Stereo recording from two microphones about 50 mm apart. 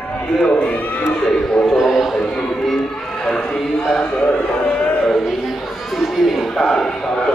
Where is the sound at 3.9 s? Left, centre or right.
Centre.